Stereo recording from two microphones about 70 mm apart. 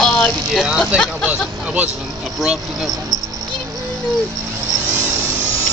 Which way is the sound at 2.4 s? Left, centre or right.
Centre.